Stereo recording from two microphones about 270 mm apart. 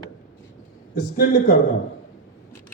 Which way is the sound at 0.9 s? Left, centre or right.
Left.